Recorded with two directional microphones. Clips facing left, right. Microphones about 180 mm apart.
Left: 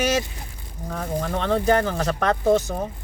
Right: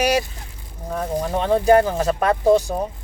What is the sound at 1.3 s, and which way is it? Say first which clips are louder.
Speech: right 5 dB; 15° right (ahead or behind).